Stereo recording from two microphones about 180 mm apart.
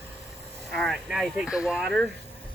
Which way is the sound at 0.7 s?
Centre (ahead or behind).